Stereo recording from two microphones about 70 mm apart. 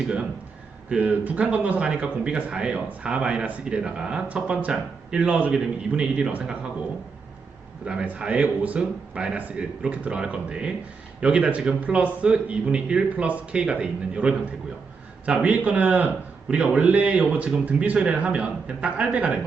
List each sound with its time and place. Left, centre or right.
0.9 s a man's voice: centre
8.0 s a man's voice: centre